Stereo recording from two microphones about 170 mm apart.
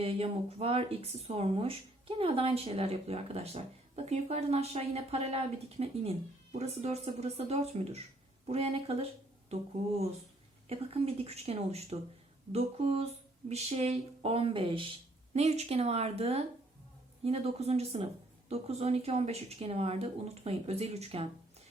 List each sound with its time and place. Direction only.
0.0 s speech: 35° right (ahead or behind)
10.7 s speech: 35° right (ahead or behind)